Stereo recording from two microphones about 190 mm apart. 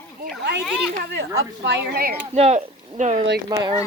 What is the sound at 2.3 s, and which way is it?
Speech, 35° right (ahead or behind).